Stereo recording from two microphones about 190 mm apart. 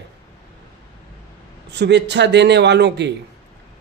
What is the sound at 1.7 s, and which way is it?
A man's voice, 60° right (ahead or behind).